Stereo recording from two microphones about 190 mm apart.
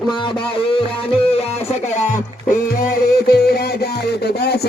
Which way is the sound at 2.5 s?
50° left (ahead or behind).